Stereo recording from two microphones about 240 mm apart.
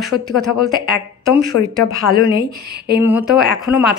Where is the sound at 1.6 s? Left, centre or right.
Left.